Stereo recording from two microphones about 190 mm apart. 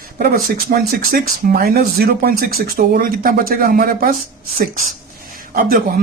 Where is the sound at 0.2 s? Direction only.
50° right (ahead or behind).